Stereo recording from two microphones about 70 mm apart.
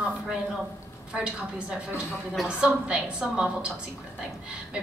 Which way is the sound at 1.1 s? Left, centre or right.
Centre.